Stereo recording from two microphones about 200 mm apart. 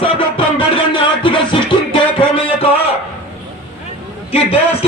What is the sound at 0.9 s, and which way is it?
Music, 25° left (ahead or behind).